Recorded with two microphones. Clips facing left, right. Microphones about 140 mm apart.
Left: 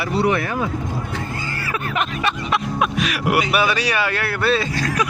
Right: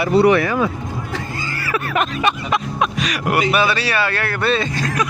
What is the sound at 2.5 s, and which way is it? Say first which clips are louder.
Speech: right 1 dB; 5° left (ahead or behind).